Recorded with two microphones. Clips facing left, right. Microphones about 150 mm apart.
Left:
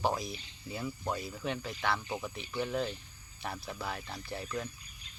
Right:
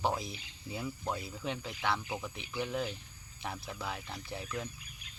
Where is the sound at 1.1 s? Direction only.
20° right (ahead or behind).